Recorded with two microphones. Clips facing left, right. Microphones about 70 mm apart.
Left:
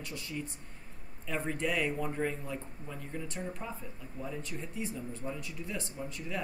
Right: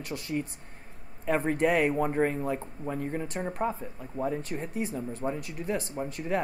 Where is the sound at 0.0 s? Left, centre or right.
Right.